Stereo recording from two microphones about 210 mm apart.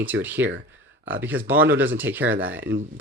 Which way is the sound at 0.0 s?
10° right (ahead or behind).